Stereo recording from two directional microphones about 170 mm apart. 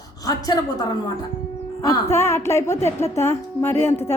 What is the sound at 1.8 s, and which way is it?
Speech, 20° left (ahead or behind).